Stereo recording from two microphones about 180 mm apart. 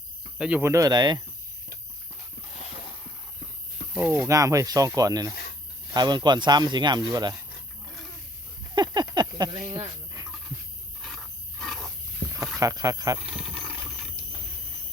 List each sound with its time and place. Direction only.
0.3 s speech: 5° right (ahead or behind)
0.6 s speech: 15° right (ahead or behind)
3.9 s speech: 10° right (ahead or behind)
8.7 s a sound: 25° right (ahead or behind)
11.6 s wild animals: centre (ahead or behind)
12.5 s speech: 20° right (ahead or behind)
13.1 s a sound: 5° right (ahead or behind)